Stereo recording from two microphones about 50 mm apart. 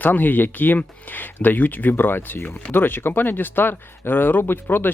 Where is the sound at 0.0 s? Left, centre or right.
Left.